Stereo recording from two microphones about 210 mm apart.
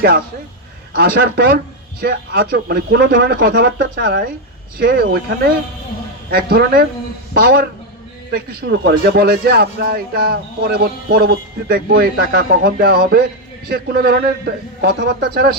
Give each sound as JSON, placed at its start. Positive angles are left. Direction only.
{"t": 0.9, "sound": "a man's voice", "side_deg": -45}